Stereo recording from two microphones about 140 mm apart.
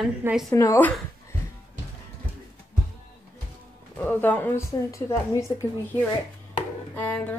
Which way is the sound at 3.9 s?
15° left (ahead or behind).